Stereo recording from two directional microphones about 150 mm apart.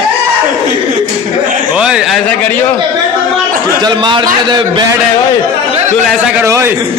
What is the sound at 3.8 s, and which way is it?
A man's voice, 30° right (ahead or behind).